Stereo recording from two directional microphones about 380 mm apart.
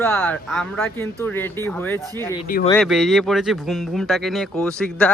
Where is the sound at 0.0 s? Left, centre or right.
Centre.